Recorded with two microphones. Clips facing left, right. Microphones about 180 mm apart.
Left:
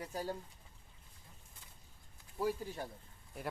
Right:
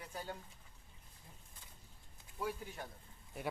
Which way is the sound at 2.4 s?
30° left (ahead or behind).